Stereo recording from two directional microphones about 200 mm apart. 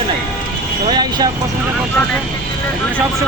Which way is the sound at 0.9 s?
20° right (ahead or behind).